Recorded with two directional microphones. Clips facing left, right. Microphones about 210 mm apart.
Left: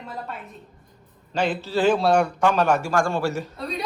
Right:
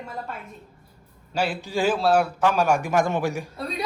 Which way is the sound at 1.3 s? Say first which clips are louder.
Left 2 dB; 10° right (ahead or behind).